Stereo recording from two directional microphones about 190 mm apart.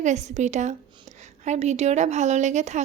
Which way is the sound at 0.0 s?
40° right (ahead or behind).